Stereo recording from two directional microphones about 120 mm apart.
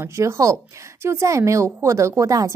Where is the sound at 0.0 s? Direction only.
25° right (ahead or behind).